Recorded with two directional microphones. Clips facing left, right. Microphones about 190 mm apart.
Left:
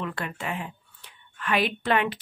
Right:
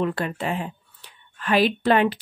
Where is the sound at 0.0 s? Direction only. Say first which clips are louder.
Right 7 dB; 35° right (ahead or behind).